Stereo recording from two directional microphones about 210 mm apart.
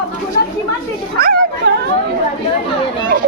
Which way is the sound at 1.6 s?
50° right (ahead or behind).